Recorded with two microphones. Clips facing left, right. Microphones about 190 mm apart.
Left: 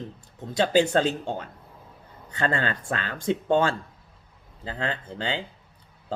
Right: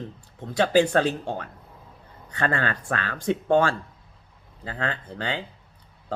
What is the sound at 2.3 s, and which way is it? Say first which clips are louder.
Speech: even; 25° left (ahead or behind).